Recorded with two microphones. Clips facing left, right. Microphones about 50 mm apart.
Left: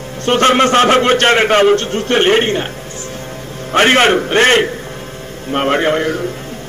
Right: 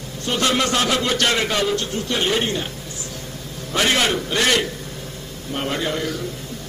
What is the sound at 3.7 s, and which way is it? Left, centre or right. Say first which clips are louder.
A man's voice: left 9 dB; left.